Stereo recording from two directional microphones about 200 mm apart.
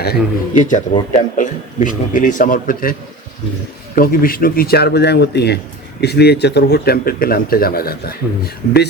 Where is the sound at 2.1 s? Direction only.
40° left (ahead or behind).